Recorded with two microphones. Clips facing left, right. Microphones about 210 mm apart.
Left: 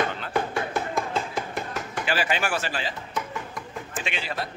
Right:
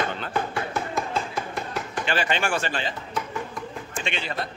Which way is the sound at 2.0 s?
5° left (ahead or behind).